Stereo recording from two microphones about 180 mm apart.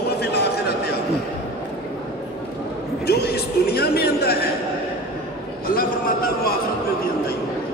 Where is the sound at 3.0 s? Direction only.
60° left (ahead or behind).